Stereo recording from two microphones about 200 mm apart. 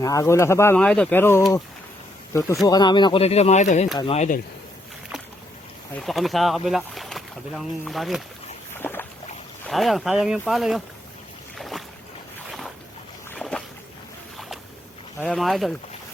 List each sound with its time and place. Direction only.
0.0 s speech: 15° left (ahead or behind)
2.6 s speech: 20° left (ahead or behind)
6.0 s speech: centre (ahead or behind)
8.8 s boat: 10° left (ahead or behind)
9.6 s speech: centre (ahead or behind)
11.5 s boat: centre (ahead or behind)
15.2 s speech: centre (ahead or behind)